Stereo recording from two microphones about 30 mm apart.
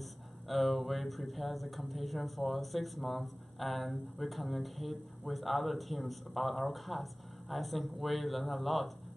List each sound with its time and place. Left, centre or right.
0.0 s speech: centre